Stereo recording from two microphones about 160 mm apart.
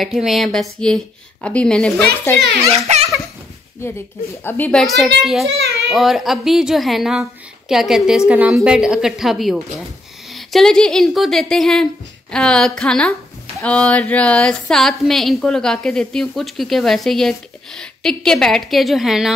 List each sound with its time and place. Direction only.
0.0 s speech: centre (ahead or behind)
2.9 s a sound: 45° right (ahead or behind)
4.5 s a woman's voice: 10° left (ahead or behind)